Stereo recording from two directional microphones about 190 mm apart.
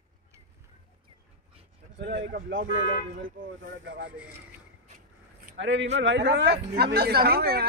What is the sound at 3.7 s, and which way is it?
Speech, 70° right (ahead or behind).